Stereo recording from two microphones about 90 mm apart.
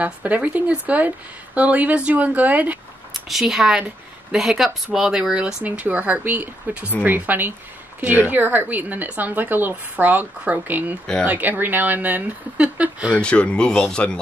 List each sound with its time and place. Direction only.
0.0 s speech: 15° right (ahead or behind)
3.3 s speech: 5° right (ahead or behind)
13.1 s speech: 10° left (ahead or behind)